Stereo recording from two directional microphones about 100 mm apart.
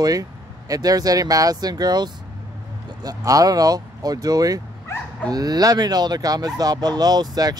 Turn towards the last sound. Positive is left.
turn(degrees=-40)  # may be behind; listen again after turning